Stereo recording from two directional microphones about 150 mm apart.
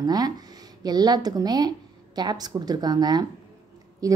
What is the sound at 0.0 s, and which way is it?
A woman's voice, 25° right (ahead or behind).